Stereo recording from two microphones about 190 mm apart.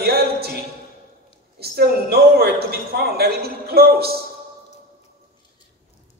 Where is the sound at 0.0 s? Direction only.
55° right (ahead or behind).